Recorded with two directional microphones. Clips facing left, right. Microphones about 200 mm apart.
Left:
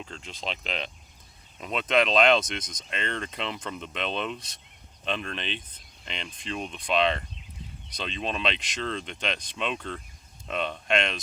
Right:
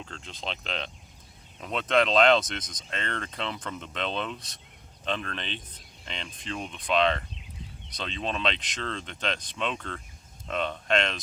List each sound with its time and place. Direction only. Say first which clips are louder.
0.0 s speech: left 1 dB; 10° left (ahead or behind)